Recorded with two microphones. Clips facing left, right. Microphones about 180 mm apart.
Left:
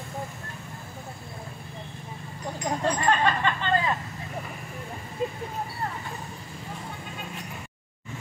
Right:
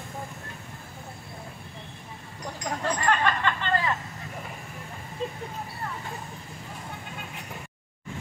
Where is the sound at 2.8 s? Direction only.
20° left (ahead or behind).